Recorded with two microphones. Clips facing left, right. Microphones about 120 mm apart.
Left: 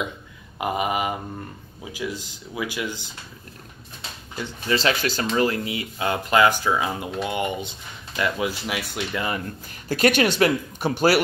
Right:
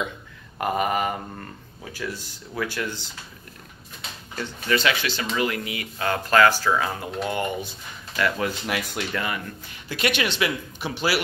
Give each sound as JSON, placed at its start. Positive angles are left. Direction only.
{"t": 0.6, "sound": "speech", "side_deg": 15}
{"t": 4.4, "sound": "speech", "side_deg": 15}
{"t": 4.7, "sound": "speech", "side_deg": 40}
{"t": 9.8, "sound": "speech", "side_deg": 40}